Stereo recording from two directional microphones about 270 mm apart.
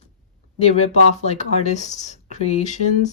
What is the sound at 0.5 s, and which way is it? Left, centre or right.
Speech, left.